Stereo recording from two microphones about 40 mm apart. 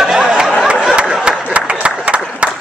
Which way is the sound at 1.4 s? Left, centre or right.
Right.